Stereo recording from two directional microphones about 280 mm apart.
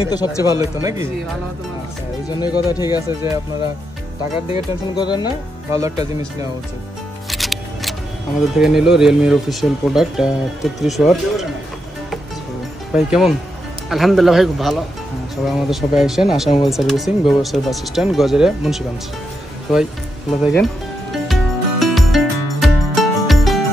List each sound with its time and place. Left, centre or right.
0.0 s speech: centre
0.5 s speech: centre
2.4 s speech: centre
4.9 s speech: centre
5.7 s speech: centre
7.2 s music: centre
8.5 s speech: centre
12.9 s speech: centre
20.4 s music: centre